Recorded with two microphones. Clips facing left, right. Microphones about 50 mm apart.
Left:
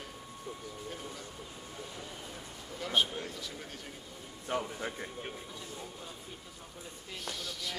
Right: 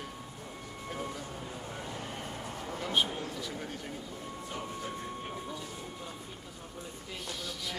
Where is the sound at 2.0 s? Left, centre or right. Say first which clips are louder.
Right 4 dB; right.